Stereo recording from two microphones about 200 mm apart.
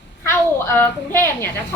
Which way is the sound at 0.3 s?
10° left (ahead or behind).